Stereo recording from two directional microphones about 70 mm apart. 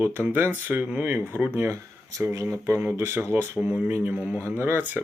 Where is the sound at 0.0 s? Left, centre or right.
Right.